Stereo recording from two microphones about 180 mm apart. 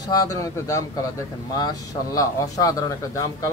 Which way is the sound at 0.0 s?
20° left (ahead or behind).